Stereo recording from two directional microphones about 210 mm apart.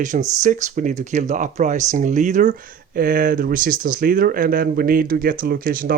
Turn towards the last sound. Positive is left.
turn(degrees=-45)  # may be behind; listen again after turning